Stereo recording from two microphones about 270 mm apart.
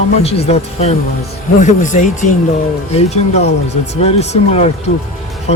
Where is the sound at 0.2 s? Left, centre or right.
Left.